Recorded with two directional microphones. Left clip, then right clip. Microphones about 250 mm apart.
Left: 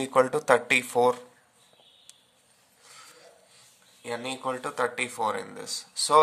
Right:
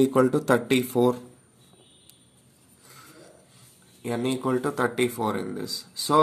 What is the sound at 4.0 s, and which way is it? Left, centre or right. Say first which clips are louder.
Speech: right 5 dB; centre.